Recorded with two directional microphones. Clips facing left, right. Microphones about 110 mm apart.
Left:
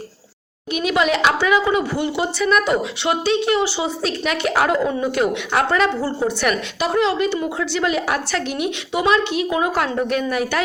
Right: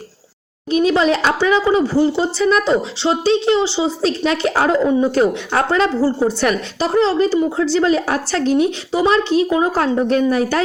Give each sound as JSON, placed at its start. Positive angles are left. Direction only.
{"t": 0.7, "sound": "speech", "side_deg": -30}
{"t": 5.1, "sound": "a woman's voice", "side_deg": -35}